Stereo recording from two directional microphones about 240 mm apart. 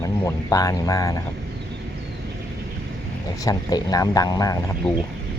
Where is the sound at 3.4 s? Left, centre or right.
Centre.